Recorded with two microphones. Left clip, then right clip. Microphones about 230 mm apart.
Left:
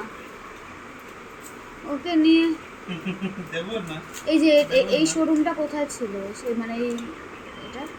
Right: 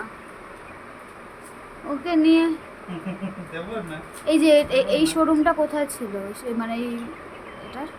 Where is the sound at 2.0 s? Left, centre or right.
Centre.